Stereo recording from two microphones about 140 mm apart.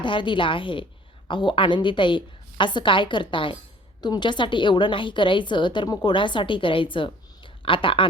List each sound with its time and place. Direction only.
0.0 s a woman's voice: 35° left (ahead or behind)